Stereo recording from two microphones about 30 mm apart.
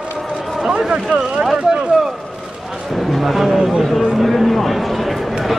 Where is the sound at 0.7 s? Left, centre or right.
Right.